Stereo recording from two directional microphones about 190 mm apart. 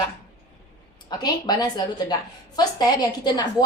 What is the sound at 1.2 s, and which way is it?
Speech, 20° left (ahead or behind).